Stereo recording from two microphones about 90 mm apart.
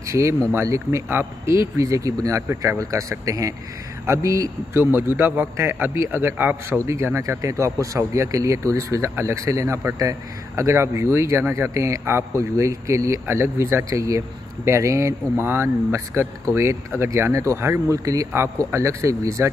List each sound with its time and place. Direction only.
0.1 s a man's voice: 35° right (ahead or behind)